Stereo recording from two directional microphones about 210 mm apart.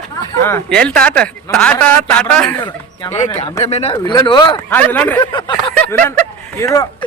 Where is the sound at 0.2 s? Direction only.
10° left (ahead or behind).